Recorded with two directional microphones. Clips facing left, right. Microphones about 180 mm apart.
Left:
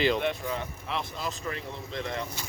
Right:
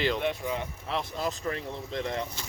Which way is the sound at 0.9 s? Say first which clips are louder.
Right 3 dB; 40° right (ahead or behind).